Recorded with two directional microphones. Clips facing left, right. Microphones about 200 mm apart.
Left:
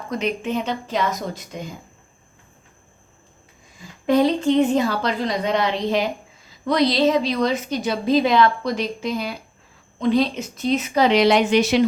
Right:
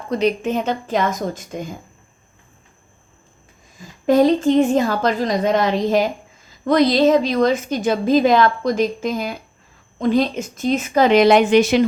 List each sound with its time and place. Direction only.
0.1 s a woman's voice: 35° right (ahead or behind)
4.0 s a woman's voice: 45° right (ahead or behind)